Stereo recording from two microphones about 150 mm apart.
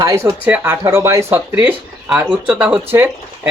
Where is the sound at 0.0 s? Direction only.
25° right (ahead or behind).